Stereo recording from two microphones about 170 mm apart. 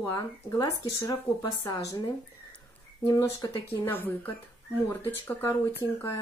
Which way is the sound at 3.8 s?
10° left (ahead or behind).